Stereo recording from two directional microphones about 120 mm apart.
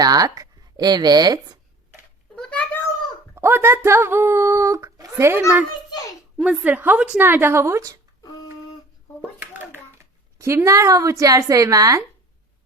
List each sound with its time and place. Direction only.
0.0 s speech: 30° right (ahead or behind)
2.3 s cat: 10° left (ahead or behind)
3.3 s speech: 20° right (ahead or behind)
6.3 s a woman's voice: 10° right (ahead or behind); by 7.9 s 25° right (ahead or behind)
9.4 s hands: 15° right (ahead or behind)
10.3 s speech: 25° right (ahead or behind)